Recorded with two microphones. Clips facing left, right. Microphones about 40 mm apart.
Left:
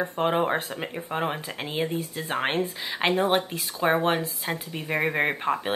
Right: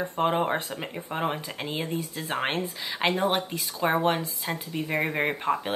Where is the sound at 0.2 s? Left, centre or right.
Centre.